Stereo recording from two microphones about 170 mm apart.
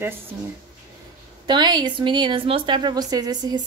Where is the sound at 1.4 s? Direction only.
25° right (ahead or behind).